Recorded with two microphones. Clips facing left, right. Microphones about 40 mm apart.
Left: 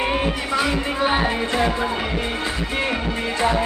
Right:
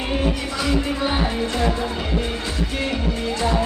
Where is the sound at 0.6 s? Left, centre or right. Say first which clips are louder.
Right 1 dB; left.